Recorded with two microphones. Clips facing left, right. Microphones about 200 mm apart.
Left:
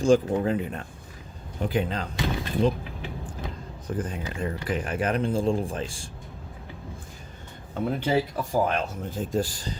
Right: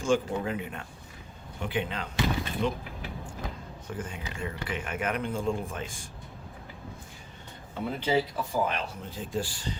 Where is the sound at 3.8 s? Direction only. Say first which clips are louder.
Left 7 dB; 35° left (ahead or behind).